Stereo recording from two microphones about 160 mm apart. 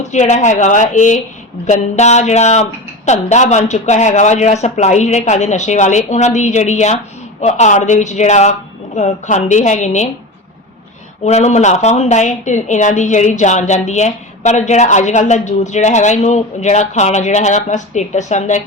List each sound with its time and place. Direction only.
0.0 s a woman's voice: 45° left (ahead or behind)
11.3 s a woman's voice: 45° left (ahead or behind)